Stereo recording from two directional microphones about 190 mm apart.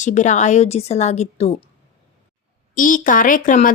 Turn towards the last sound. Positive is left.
turn(degrees=45)  # may be behind; listen again after turning